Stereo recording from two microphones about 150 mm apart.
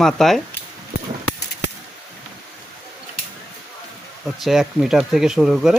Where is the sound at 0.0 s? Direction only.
Centre (ahead or behind).